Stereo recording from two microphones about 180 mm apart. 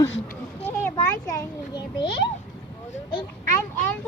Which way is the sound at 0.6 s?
10° left (ahead or behind).